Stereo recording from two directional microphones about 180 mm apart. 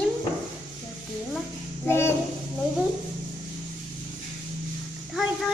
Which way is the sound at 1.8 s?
15° left (ahead or behind).